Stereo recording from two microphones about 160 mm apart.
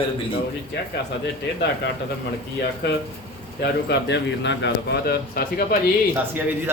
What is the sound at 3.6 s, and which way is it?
A man's voice, 90° left.